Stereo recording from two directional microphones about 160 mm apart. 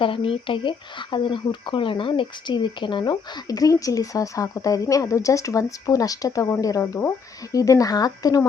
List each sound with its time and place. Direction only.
0.0 s speech: 35° left (ahead or behind)